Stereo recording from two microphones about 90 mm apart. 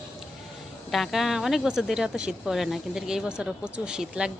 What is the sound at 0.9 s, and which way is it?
Speech, centre (ahead or behind).